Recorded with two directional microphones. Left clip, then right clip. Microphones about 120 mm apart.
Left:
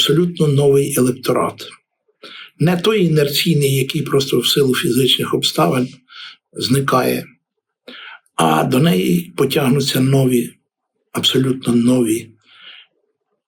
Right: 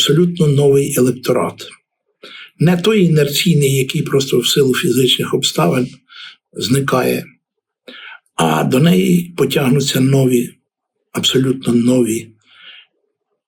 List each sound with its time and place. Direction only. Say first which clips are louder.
0.0 s speech: right 1 dB; 15° left (ahead or behind)